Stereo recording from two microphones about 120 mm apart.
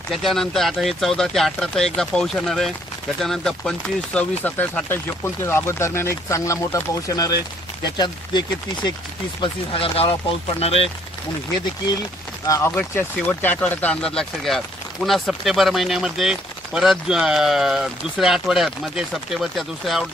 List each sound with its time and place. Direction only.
0.1 s speech: centre (ahead or behind); by 8.9 s 35° left (ahead or behind)
9.4 s speech: 50° left (ahead or behind)
12.4 s speech: 25° left (ahead or behind)
12.7 s speech: 15° left (ahead or behind)